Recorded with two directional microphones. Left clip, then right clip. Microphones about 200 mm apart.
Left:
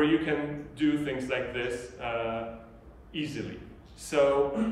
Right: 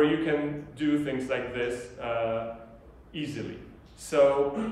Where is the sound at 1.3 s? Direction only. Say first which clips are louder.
Right 1 dB; 15° right (ahead or behind).